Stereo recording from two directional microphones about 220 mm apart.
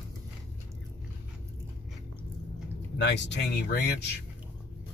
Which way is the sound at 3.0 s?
55° left (ahead or behind).